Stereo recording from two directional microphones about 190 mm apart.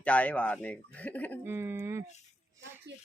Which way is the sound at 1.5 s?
15° right (ahead or behind).